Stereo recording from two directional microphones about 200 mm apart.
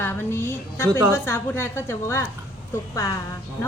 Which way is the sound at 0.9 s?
15° right (ahead or behind).